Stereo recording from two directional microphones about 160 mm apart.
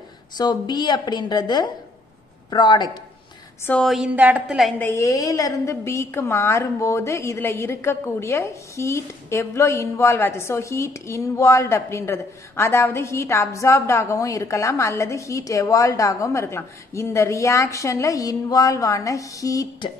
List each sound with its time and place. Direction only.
0.4 s a woman's voice: 25° left (ahead or behind)
3.6 s a woman's voice: 5° left (ahead or behind)
4.7 s a woman's voice: 15° left (ahead or behind)